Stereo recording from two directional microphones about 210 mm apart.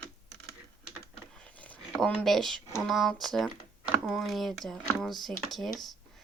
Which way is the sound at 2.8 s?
Centre (ahead or behind).